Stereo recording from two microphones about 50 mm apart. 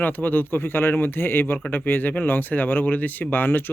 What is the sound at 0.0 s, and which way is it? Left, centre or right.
Speech, left.